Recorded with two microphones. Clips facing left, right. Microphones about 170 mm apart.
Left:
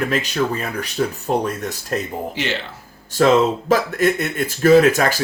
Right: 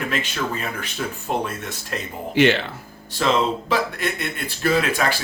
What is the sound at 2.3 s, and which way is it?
Speech, 60° right (ahead or behind).